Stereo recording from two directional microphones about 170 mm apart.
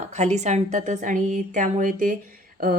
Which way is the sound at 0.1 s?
40° right (ahead or behind).